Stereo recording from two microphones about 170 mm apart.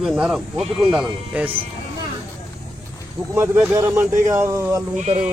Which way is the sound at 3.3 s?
15° right (ahead or behind).